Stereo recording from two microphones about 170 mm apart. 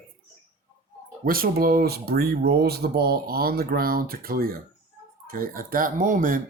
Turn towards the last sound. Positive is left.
turn(degrees=-55)  # may be behind; listen again after turning